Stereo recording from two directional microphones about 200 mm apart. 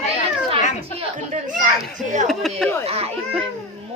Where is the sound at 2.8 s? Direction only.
30° right (ahead or behind).